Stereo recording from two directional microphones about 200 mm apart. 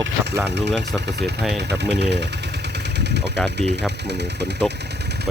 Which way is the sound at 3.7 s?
60° right (ahead or behind).